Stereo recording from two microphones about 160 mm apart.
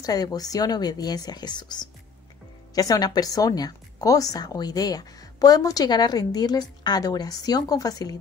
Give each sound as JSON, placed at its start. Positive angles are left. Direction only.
{"t": 0.0, "sound": "speech", "side_deg": 25}